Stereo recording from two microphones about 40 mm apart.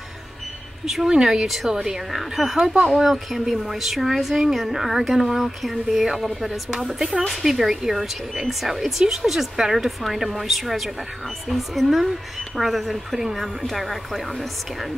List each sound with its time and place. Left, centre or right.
1.0 s speech: centre
2.6 s speech: centre
2.9 s a woman's voice: centre
7.2 s a woman's voice: centre